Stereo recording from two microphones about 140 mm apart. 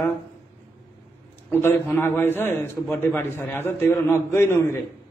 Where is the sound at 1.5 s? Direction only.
15° left (ahead or behind).